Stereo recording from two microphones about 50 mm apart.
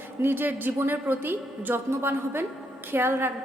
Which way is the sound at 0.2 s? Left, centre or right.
Right.